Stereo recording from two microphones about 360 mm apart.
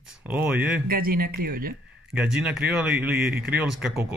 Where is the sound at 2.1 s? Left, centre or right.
Centre.